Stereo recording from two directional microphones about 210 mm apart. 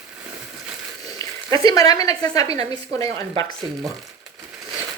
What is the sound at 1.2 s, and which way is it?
Speech, 15° left (ahead or behind).